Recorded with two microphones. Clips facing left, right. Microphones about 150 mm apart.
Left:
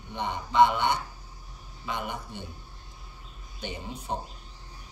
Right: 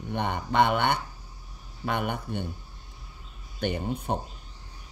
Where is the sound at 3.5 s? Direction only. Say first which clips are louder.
Right 8 dB; 60° right (ahead or behind).